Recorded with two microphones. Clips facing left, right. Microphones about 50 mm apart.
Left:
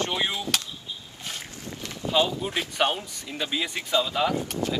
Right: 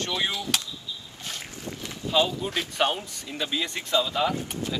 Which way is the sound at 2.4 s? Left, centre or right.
Centre.